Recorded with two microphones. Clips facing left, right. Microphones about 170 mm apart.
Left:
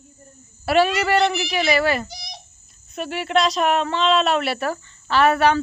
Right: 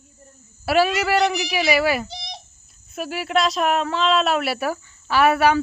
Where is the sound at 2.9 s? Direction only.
5° right (ahead or behind).